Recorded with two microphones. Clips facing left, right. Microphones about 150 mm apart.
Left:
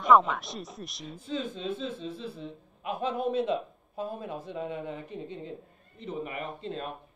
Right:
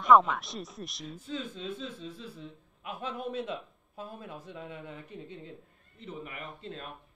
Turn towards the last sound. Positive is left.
turn(degrees=25)  # may be behind; listen again after turning